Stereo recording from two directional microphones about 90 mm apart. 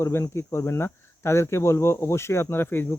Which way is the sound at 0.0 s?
30° left (ahead or behind).